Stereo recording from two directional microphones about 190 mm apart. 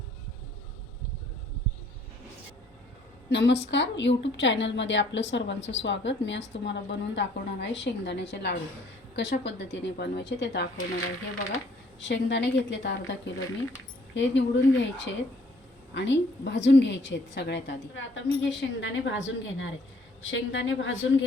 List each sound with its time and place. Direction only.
3.2 s a woman's voice: 65° left (ahead or behind)
11.9 s a woman's voice: 70° left (ahead or behind)